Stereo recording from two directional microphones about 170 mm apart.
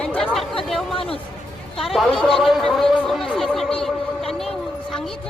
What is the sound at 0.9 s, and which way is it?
Speech, 35° left (ahead or behind).